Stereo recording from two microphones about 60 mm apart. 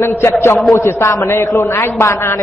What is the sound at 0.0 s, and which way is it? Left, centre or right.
A man's voice, left.